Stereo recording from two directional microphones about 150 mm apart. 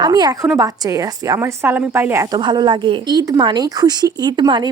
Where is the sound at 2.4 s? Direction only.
30° right (ahead or behind).